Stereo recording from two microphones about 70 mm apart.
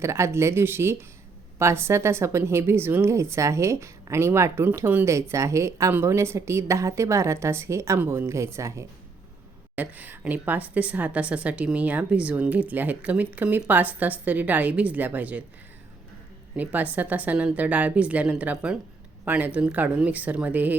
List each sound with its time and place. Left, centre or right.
0.0 s a woman's voice: right
5.9 s a woman's voice: right
9.7 s a woman's voice: right
16.6 s a woman's voice: right